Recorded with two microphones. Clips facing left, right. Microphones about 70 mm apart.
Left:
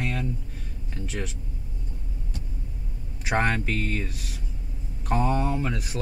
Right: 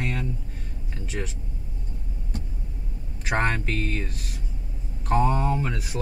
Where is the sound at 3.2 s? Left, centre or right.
Centre.